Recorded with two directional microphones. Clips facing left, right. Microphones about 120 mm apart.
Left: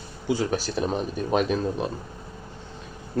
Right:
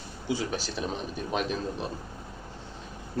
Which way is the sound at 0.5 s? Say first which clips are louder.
Left 7 dB; 45° left (ahead or behind).